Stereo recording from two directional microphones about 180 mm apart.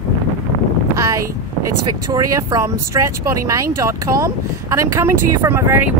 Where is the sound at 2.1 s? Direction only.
20° right (ahead or behind).